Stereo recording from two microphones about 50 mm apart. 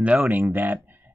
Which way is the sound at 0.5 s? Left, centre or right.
Right.